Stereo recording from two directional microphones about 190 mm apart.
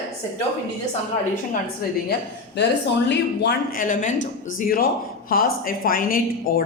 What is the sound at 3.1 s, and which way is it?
A woman's voice, 55° left (ahead or behind).